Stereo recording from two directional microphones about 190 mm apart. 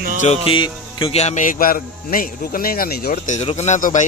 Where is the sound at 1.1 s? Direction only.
35° left (ahead or behind); by 3.3 s 55° left (ahead or behind).